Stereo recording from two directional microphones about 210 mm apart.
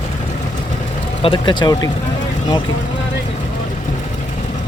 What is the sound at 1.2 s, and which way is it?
Speech, 25° left (ahead or behind).